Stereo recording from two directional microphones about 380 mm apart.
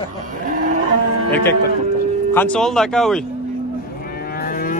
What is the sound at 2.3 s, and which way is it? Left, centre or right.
Speech, centre.